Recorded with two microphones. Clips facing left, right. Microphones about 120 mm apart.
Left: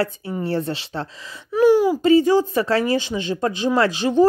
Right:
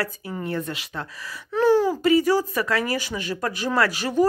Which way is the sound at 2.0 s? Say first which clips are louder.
Left 4 dB; 25° left (ahead or behind).